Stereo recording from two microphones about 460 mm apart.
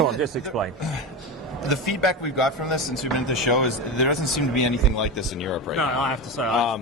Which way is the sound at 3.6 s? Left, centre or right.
Left.